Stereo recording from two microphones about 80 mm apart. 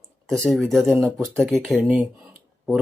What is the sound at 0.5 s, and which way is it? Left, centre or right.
Speech, centre.